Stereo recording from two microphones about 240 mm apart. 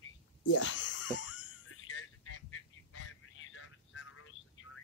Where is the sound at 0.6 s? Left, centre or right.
Left.